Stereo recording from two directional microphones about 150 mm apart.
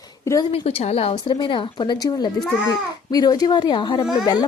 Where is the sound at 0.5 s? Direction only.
40° left (ahead or behind).